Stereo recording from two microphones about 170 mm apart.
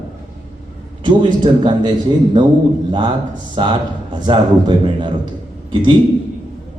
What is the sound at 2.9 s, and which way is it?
A man's voice, 25° right (ahead or behind).